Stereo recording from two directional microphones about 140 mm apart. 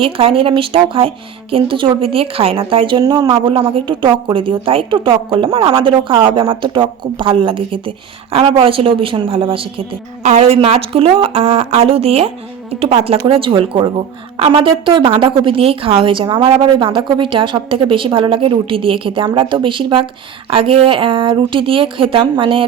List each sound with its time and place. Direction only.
0.0 s speech: 40° right (ahead or behind)
10.2 s speech: 50° right (ahead or behind)